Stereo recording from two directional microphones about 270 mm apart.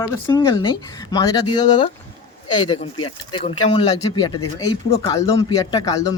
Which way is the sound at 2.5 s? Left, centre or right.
Centre.